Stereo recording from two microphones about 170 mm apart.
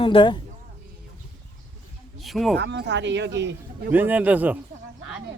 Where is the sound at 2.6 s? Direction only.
80° right.